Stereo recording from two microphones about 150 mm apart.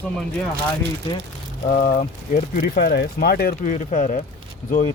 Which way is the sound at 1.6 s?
65° left (ahead or behind).